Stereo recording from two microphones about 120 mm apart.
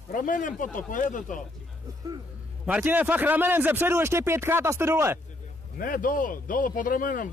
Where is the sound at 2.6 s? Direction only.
15° right (ahead or behind).